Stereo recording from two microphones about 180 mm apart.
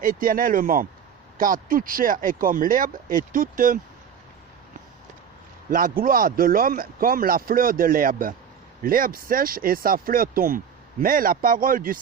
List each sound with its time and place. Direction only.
0.0 s speech: 50° right (ahead or behind)
5.7 s speech: 50° right (ahead or behind)